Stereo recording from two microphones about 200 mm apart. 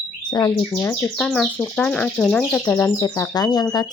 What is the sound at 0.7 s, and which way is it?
Speech, 10° left (ahead or behind).